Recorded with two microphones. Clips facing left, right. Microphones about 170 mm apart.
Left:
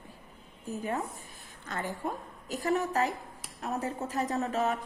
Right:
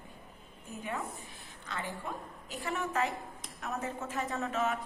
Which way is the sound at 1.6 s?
45° left (ahead or behind).